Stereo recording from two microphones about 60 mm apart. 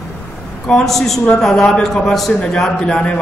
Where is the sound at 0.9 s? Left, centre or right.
Centre.